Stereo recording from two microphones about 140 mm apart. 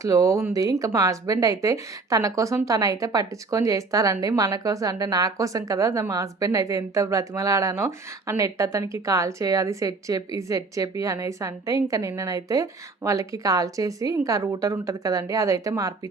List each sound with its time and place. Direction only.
0.0 s a woman's voice: 20° right (ahead or behind)